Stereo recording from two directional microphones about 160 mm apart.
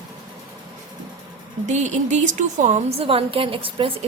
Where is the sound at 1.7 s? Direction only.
45° right (ahead or behind).